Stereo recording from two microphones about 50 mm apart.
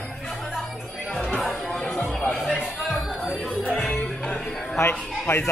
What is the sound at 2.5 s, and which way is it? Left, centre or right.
Music, centre.